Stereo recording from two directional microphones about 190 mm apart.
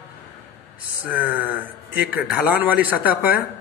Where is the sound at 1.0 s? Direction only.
10° right (ahead or behind).